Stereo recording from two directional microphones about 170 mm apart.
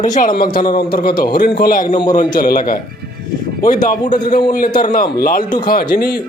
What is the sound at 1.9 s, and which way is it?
Speech, 25° left (ahead or behind).